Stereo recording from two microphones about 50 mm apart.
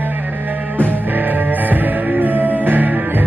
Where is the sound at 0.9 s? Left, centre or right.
Right.